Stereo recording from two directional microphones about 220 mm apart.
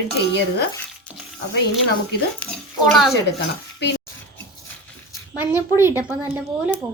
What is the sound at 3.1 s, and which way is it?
Speech, 50° left (ahead or behind).